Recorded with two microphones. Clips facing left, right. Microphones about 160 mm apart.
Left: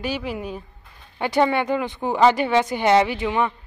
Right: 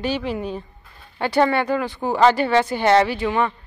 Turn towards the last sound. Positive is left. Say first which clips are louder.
# right 1 dB
turn(degrees=15)  # may be behind; listen again after turning